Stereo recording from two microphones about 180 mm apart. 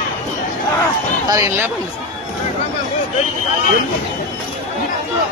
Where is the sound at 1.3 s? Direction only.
15° right (ahead or behind).